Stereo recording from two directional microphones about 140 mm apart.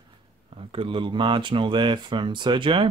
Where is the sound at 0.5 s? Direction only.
40° right (ahead or behind).